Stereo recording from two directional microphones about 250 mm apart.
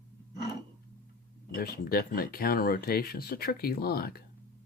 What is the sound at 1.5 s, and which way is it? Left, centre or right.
Speech, left.